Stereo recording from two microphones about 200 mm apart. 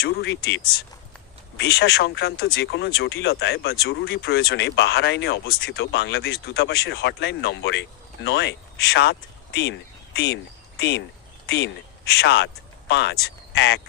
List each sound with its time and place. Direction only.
0.0 s speech: 55° left (ahead or behind)